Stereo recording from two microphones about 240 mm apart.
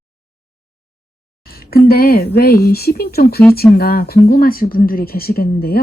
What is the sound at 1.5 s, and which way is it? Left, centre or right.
Speech, left.